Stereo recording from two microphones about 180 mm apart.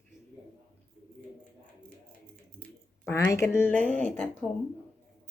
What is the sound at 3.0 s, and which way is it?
Speech, 15° left (ahead or behind).